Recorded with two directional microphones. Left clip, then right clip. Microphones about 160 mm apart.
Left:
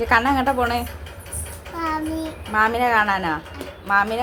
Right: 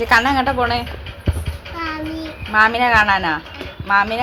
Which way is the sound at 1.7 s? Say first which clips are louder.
Left 1 dB; 15° left (ahead or behind).